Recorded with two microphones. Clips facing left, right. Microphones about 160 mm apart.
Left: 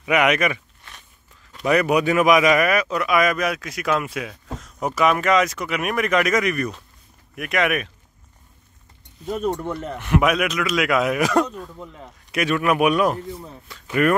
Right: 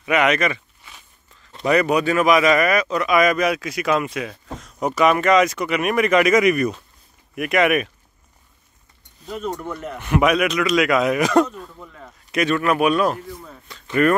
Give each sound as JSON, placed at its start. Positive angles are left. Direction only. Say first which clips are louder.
{"t": 0.0, "sound": "speech", "louder": "even", "side_deg": 10}
{"t": 1.6, "sound": "speech", "louder": "right 1 dB", "side_deg": 5}
{"t": 9.6, "sound": "speech", "louder": "left 2 dB", "side_deg": 30}
{"t": 9.9, "sound": "speech", "louder": "right 2 dB", "side_deg": 0}
{"t": 11.8, "sound": "speech", "louder": "left 2 dB", "side_deg": 20}
{"t": 12.3, "sound": "speech", "louder": "right 1 dB", "side_deg": 10}
{"t": 13.3, "sound": "speech", "louder": "left 2 dB", "side_deg": 25}
{"t": 13.7, "sound": "speech", "louder": "right 2 dB", "side_deg": 5}